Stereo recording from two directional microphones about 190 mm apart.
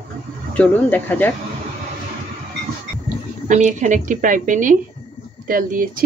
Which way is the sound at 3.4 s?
40° right (ahead or behind).